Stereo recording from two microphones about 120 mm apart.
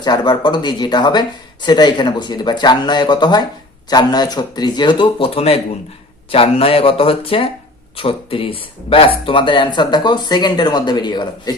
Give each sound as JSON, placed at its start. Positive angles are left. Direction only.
{"t": 0.0, "sound": "speech", "side_deg": 35}